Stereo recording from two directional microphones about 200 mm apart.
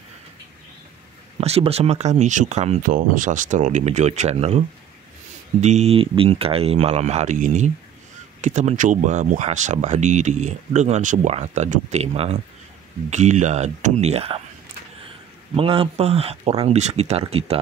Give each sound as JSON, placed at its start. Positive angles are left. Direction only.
{"t": 1.4, "sound": "speech", "side_deg": -30}
{"t": 15.5, "sound": "speech", "side_deg": -25}